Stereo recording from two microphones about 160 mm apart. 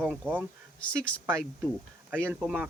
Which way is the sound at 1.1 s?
10° left (ahead or behind).